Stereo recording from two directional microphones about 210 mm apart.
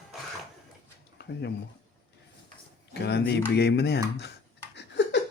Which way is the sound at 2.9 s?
50° left (ahead or behind).